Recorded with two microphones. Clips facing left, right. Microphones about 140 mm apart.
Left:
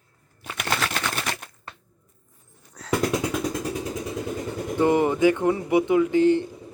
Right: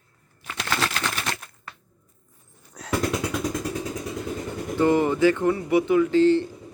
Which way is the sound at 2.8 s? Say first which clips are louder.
Right 2 dB; 15° right (ahead or behind).